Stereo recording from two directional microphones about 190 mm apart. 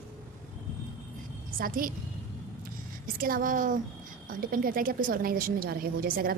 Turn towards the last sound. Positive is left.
turn(degrees=-50)  # may be behind; listen again after turning